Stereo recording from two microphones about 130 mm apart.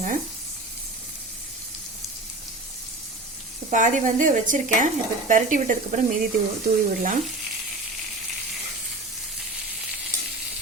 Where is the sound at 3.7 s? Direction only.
75° right (ahead or behind).